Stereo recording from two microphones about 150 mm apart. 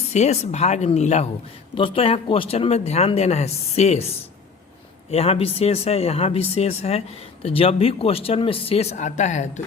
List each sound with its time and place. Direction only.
0.1 s speech: 45° left (ahead or behind)
1.7 s speech: 35° left (ahead or behind)
5.1 s speech: 40° left (ahead or behind)